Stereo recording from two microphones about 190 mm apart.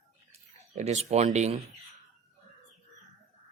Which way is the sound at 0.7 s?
35° right (ahead or behind).